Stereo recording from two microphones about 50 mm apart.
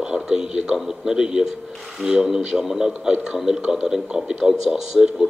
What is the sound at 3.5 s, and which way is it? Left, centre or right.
Speech, right.